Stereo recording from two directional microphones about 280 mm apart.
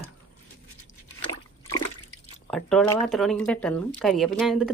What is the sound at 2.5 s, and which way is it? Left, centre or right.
Speech, centre.